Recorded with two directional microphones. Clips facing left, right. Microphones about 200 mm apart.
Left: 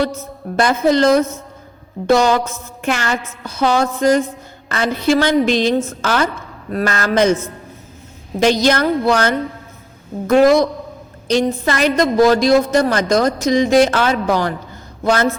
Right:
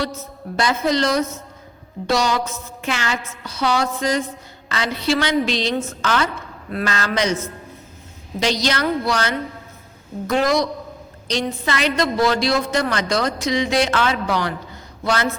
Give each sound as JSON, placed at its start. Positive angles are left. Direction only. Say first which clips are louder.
{"t": 0.5, "sound": "a woman's voice", "louder": "left 5 dB", "side_deg": 50}
{"t": 8.4, "sound": "a woman's voice", "louder": "left 7 dB", "side_deg": 50}